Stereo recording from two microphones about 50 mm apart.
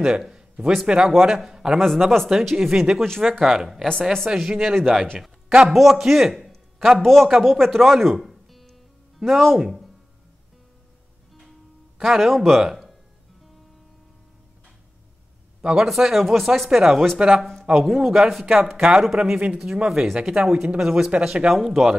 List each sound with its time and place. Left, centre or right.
0.0 s a man's voice: centre
3.0 s a man's voice: centre
12.0 s speech: centre
15.7 s speech: centre
19.0 s speech: centre
19.3 s speech: centre
19.9 s speech: centre
20.2 s speech: centre
21.5 s speech: centre